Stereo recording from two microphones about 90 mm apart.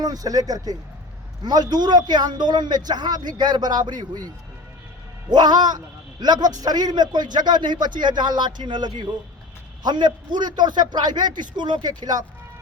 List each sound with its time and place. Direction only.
0.0 s a man's voice: 45° right (ahead or behind)
5.3 s a man's voice: 50° right (ahead or behind)